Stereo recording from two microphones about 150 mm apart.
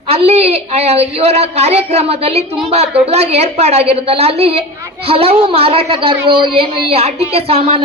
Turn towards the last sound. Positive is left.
turn(degrees=-35)  # may be behind; listen again after turning